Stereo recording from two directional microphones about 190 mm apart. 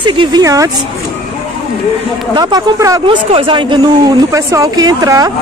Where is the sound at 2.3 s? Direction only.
20° right (ahead or behind).